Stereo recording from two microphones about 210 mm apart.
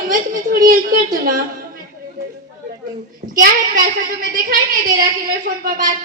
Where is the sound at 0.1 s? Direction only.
40° right (ahead or behind).